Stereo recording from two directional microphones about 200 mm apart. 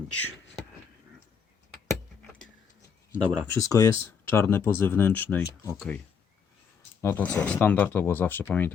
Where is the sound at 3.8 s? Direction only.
15° left (ahead or behind).